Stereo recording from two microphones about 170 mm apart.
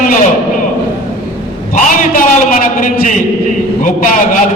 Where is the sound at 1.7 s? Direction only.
50° left (ahead or behind).